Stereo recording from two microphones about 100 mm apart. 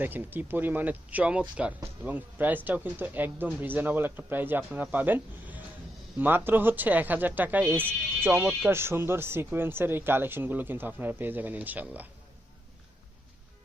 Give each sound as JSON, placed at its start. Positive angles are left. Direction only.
{"t": 0.0, "sound": "speech", "side_deg": -20}